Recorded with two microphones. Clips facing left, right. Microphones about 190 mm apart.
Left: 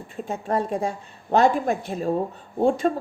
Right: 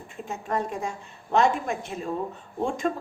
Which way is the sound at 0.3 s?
30° left (ahead or behind).